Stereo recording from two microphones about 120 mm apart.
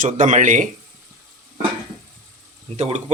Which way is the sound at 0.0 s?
90° right.